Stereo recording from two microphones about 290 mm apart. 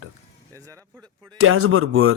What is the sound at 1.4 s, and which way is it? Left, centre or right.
Speech, right.